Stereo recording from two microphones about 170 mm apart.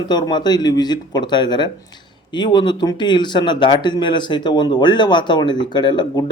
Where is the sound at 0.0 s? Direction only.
25° left (ahead or behind).